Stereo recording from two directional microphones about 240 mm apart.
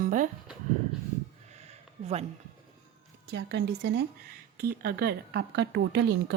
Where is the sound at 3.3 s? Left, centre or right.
Right.